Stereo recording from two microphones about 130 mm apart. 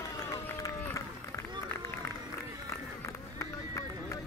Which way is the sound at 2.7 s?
20° left (ahead or behind).